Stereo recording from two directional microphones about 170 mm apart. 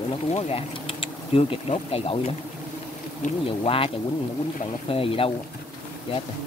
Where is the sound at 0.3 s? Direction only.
35° left (ahead or behind).